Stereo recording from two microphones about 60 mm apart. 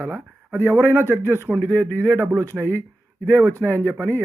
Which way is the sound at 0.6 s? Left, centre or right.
Right.